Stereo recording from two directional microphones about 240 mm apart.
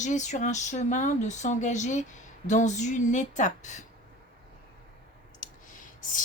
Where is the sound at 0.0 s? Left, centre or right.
Left.